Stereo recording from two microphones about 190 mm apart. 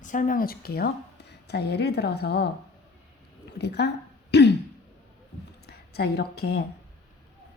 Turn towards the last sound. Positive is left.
turn(degrees=60)  # may be behind; listen again after turning